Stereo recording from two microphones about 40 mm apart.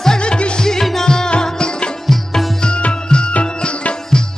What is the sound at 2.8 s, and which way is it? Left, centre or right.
Music, left.